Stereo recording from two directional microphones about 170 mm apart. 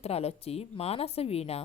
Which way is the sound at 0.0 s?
35° left (ahead or behind).